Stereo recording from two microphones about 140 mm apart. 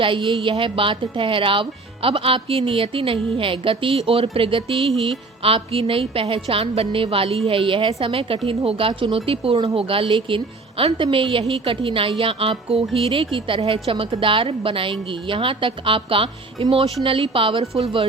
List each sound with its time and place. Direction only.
0.0 s a woman's voice: 35° right (ahead or behind)